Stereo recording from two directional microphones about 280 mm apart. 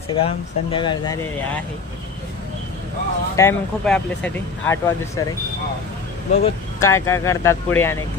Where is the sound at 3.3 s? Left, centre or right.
Centre.